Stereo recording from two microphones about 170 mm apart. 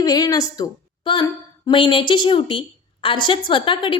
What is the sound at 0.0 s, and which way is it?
A woman's voice, 20° left (ahead or behind).